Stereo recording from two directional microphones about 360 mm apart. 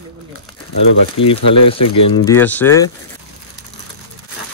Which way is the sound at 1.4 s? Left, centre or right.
Left.